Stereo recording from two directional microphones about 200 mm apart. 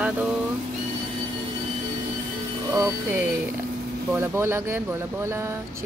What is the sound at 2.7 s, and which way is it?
Speech, 15° right (ahead or behind).